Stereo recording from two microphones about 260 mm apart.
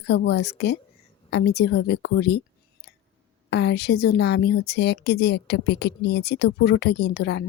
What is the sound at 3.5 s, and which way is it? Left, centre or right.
A woman's voice, left.